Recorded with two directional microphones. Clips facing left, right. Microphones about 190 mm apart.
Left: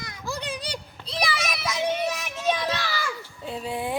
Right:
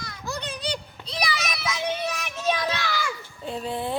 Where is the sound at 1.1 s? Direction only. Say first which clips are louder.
Left 1 dB; 30° left (ahead or behind).